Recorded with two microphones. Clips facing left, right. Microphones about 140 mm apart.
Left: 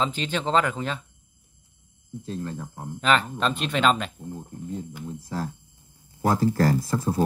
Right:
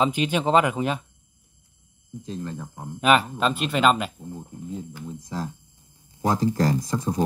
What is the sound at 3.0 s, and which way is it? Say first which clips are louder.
Speech: right 3 dB; 10° right (ahead or behind).